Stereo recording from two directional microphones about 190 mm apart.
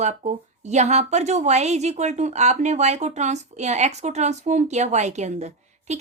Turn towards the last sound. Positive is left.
turn(degrees=-35)  # may be behind; listen again after turning